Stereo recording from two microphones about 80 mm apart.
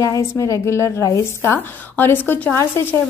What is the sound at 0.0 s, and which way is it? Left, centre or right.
A woman's voice, left.